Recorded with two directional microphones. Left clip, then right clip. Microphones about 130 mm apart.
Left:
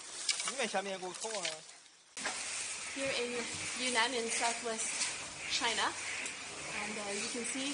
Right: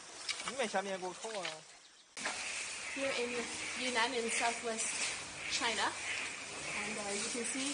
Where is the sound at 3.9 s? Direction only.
50° left (ahead or behind).